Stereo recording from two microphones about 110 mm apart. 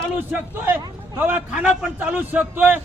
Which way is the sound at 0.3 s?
15° right (ahead or behind).